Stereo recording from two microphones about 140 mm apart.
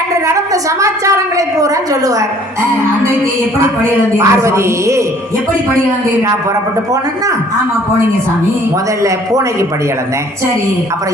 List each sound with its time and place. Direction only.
0.3 s a woman's voice: 20° right (ahead or behind)
4.2 s a woman's voice: 20° right (ahead or behind)
9.0 s a woman's voice: 20° right (ahead or behind)